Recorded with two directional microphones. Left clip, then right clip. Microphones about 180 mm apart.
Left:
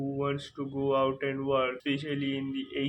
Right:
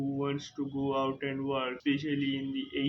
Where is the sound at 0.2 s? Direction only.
25° left (ahead or behind).